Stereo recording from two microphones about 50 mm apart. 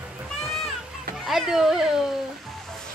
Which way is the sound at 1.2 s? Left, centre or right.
Centre.